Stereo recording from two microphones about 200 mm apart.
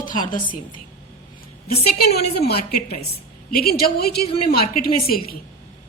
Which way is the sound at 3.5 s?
50° left (ahead or behind).